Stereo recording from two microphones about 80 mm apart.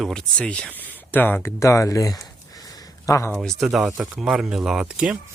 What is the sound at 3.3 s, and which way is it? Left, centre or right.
Speech, centre.